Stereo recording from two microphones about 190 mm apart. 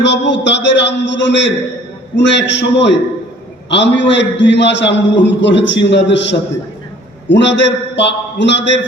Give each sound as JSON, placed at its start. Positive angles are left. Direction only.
{"t": 0.0, "sound": "a man's voice", "side_deg": 65}
{"t": 7.3, "sound": "a man's voice", "side_deg": 70}